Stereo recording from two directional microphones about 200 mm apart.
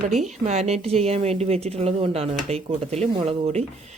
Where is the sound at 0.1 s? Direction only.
35° right (ahead or behind).